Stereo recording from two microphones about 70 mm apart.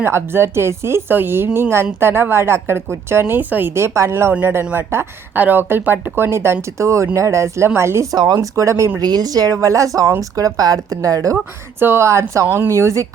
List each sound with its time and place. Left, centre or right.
0.0 s speech: right
8.1 s speech: right
8.4 s speech: right
9.0 s speech: right
11.8 s speech: right
12.0 s speech: right